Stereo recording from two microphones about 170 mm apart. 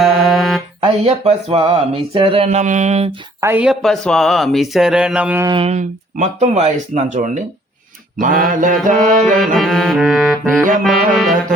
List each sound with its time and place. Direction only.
0.0 s mantra: centre (ahead or behind)
0.8 s speech: 35° right (ahead or behind)
3.4 s a woman's voice: 10° right (ahead or behind)
3.8 s speech: 5° left (ahead or behind)
5.5 s speech: 35° right (ahead or behind); by 9.0 s 50° right (ahead or behind)
9.6 s speech: centre (ahead or behind)